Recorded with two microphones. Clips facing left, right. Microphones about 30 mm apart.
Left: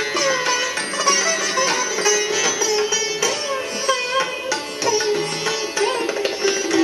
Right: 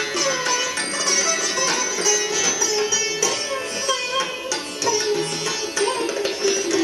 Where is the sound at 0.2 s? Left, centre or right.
Centre.